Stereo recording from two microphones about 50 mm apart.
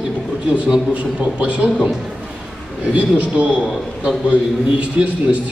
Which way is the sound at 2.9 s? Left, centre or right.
Right.